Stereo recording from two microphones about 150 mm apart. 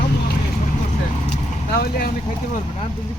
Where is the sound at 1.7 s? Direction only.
90° left.